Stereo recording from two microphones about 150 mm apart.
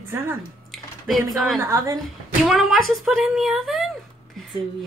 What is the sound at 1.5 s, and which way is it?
Speech, 20° right (ahead or behind).